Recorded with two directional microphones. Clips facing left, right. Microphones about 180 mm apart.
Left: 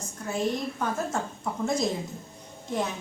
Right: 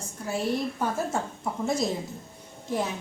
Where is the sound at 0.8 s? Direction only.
10° right (ahead or behind).